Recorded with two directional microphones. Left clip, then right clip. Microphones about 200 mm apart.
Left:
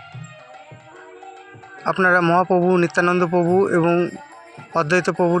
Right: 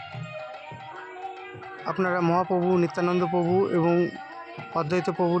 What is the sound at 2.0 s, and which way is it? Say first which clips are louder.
Speech: left 8 dB; 10° left (ahead or behind).